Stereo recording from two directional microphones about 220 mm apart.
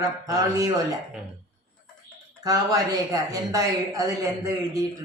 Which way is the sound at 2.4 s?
15° right (ahead or behind).